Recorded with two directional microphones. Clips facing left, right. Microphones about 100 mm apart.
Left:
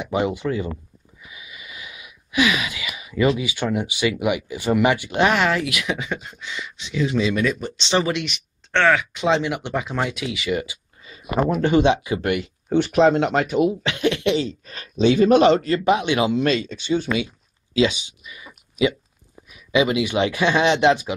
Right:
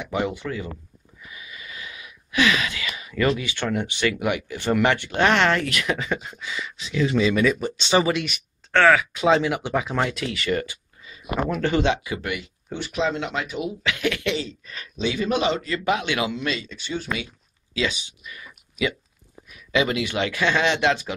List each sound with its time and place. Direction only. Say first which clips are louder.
0.0 s speech: left 4 dB; 15° left (ahead or behind)
12.4 s speech: left 12 dB; 65° left (ahead or behind); by 13.7 s 50° left (ahead or behind)
13.7 s speech: left 4 dB; 30° left (ahead or behind)
14.6 s speech: left 8 dB; 40° left (ahead or behind)
15.8 s speech: left 5 dB; 20° left (ahead or behind)
16.3 s speech: left 7 dB; 40° left (ahead or behind)
16.8 s speech: left 6 dB; 20° left (ahead or behind)